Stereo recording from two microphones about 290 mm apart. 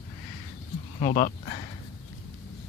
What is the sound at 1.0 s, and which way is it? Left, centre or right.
Speech, left.